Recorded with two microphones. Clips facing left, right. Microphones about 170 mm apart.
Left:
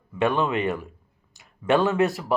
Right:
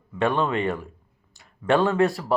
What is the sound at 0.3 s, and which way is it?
Speech, 20° left (ahead or behind).